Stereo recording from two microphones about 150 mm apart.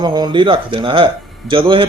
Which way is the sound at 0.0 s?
30° right (ahead or behind).